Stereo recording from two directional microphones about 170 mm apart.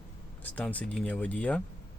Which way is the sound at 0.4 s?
10° left (ahead or behind).